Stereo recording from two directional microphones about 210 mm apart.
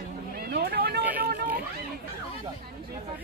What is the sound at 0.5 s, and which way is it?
Speech, 50° right (ahead or behind).